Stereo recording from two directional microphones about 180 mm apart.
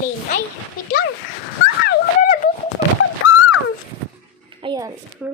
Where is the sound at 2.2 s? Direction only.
50° left (ahead or behind).